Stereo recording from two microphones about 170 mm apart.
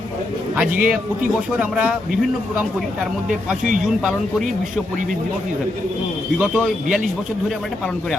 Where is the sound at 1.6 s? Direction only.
5° right (ahead or behind).